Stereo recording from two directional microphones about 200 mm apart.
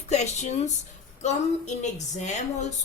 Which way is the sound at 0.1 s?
35° left (ahead or behind).